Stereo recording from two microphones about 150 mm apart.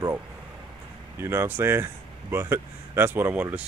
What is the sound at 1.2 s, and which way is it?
Speech, 15° right (ahead or behind).